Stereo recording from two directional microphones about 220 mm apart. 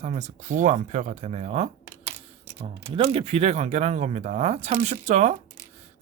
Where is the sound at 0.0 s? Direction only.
30° right (ahead or behind).